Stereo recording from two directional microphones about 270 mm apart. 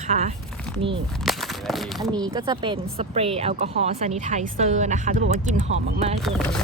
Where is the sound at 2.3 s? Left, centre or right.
Centre.